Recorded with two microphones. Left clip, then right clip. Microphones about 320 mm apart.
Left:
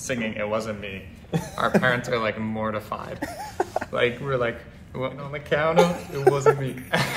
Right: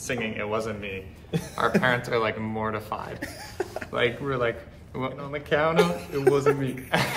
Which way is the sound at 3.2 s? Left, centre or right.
Centre.